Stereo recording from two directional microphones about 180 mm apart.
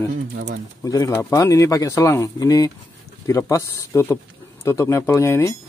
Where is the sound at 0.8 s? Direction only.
20° left (ahead or behind).